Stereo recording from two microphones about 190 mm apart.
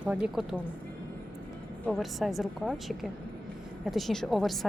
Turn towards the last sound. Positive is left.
turn(degrees=0)  # may be behind; listen again after turning